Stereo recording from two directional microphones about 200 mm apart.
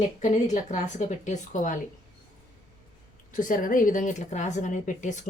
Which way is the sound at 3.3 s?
40° left (ahead or behind).